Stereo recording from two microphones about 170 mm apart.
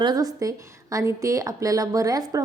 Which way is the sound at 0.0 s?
20° right (ahead or behind).